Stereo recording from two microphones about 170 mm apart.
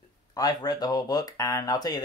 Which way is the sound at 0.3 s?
20° left (ahead or behind).